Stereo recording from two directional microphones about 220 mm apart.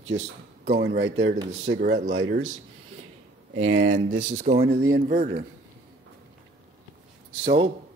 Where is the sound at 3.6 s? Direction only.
60° right (ahead or behind).